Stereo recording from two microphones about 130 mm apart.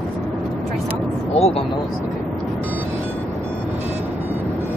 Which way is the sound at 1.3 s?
50° left (ahead or behind).